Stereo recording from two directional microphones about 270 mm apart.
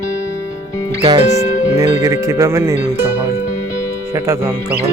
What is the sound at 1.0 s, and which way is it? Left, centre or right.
Speech, centre.